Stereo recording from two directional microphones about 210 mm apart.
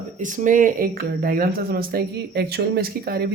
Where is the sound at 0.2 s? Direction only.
40° right (ahead or behind).